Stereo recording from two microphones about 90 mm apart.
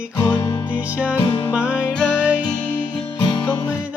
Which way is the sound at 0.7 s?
15° right (ahead or behind).